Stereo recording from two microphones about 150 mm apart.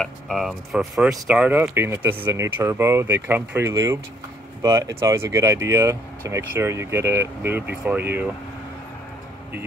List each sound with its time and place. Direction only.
0.0 s speech: centre (ahead or behind)